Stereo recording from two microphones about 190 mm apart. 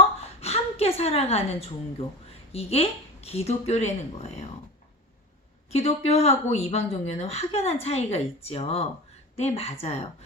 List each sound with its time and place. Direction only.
0.2 s a woman's voice: 35° left (ahead or behind)
5.7 s a woman's voice: 35° left (ahead or behind)